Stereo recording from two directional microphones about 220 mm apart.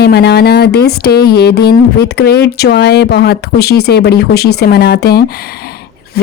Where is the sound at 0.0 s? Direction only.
50° left (ahead or behind).